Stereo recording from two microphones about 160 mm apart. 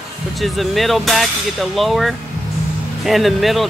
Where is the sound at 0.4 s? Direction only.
Centre (ahead or behind).